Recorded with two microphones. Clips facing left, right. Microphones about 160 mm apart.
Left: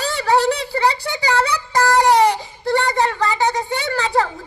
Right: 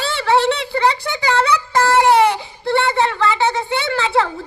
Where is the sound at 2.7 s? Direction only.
40° left (ahead or behind).